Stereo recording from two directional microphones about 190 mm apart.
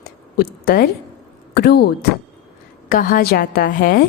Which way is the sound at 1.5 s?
55° left (ahead or behind).